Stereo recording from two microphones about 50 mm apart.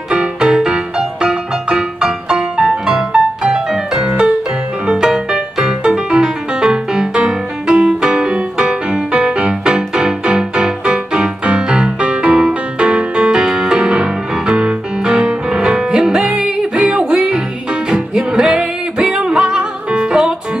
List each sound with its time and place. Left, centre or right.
0.1 s music: centre